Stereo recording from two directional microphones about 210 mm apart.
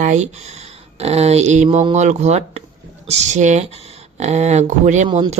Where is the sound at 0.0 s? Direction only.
35° right (ahead or behind).